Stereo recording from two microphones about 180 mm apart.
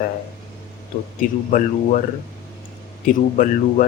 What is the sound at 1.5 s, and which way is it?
Speech, 50° left (ahead or behind).